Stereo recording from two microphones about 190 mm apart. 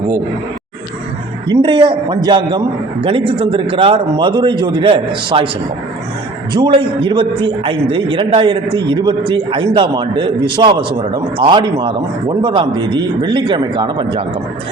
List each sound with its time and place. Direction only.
1.5 s a man's voice: 25° right (ahead or behind)
6.5 s a man's voice: 25° right (ahead or behind)